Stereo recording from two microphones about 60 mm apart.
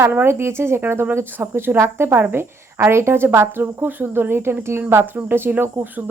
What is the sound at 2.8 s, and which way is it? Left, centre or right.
Speech, right.